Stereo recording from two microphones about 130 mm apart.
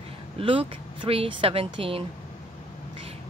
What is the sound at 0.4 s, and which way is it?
Speech, 45° right (ahead or behind).